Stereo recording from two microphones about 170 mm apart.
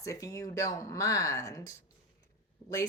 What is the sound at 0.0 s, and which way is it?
Speech, 20° left (ahead or behind).